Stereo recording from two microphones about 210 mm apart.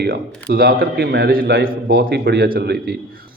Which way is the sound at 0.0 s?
45° right (ahead or behind).